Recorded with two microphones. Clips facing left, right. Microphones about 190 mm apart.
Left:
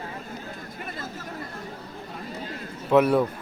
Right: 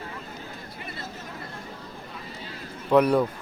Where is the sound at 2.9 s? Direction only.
5° left (ahead or behind).